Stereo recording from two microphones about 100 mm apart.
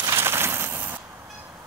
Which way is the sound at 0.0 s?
25° right (ahead or behind).